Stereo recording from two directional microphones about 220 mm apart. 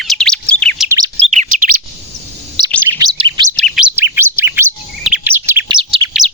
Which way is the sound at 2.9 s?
20° right (ahead or behind).